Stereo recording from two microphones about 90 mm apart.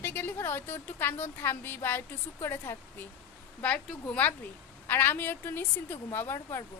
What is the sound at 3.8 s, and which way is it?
A woman's voice, 15° left (ahead or behind).